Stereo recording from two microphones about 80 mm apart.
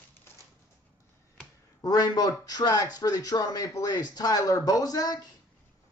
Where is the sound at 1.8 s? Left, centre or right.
Left.